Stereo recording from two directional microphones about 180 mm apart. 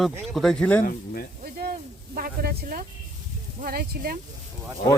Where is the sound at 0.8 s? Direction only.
50° left (ahead or behind).